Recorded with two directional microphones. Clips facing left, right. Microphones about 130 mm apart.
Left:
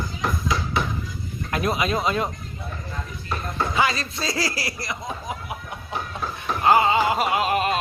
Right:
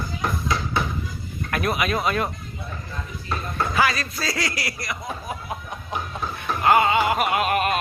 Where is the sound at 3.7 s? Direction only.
25° left (ahead or behind).